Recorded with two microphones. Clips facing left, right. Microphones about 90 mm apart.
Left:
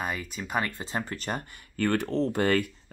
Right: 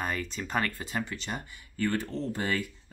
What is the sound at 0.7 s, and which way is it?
Speech, 30° left (ahead or behind).